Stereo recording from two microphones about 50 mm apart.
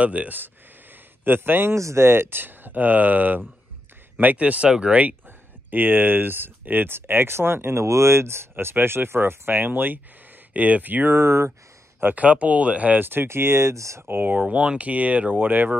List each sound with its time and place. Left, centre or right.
0.0 s speech: right
1.2 s speech: right
1.8 s speech: right
2.0 s speech: right
5.7 s speech: right
10.5 s speech: right
11.1 s speech: right
12.2 s speech: right
13.0 s speech: right
14.0 s speech: right